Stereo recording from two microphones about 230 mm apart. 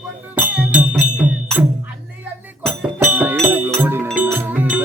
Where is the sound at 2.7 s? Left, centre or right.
Centre.